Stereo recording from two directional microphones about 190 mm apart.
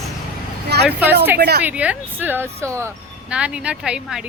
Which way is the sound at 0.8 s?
10° right (ahead or behind).